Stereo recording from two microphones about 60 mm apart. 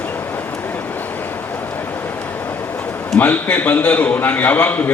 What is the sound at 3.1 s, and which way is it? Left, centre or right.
A man's voice, left.